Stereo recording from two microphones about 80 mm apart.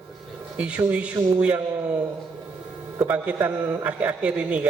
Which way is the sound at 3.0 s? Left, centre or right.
Right.